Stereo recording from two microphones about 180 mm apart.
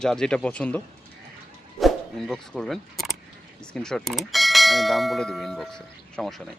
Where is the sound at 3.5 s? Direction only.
5° left (ahead or behind).